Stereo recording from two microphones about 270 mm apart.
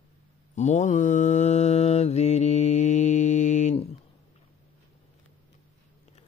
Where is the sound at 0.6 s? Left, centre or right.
Left.